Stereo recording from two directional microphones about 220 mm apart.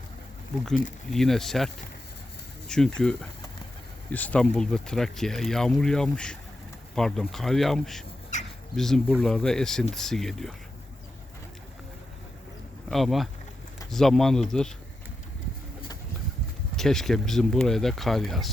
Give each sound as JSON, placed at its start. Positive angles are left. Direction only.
{"t": 1.1, "sound": "speech", "side_deg": 0}
{"t": 8.3, "sound": "bird", "side_deg": 35}
{"t": 8.7, "sound": "speech", "side_deg": 0}
{"t": 12.9, "sound": "speech", "side_deg": 0}
{"t": 16.7, "sound": "speech", "side_deg": 0}